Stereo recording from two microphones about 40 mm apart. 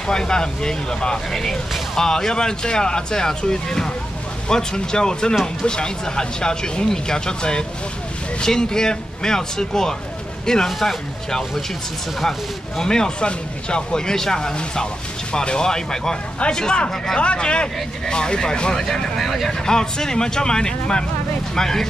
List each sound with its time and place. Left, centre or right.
0.0 s speech: centre
10.7 s speech: centre
17.2 s speech: left
18.9 s speech: centre
19.6 s speech: centre